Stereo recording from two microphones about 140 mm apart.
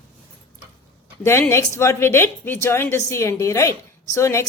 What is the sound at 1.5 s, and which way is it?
A woman's voice, 20° left (ahead or behind).